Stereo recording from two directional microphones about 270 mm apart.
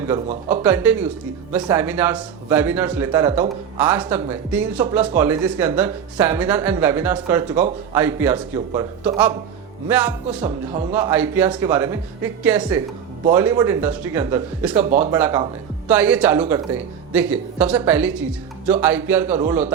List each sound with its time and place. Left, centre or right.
0.6 s speech: centre
10.9 s speech: centre
14.8 s speech: right
15.1 s speech: centre